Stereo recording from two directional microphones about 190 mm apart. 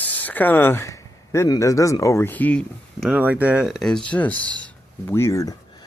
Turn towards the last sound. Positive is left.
turn(degrees=15)  # may be behind; listen again after turning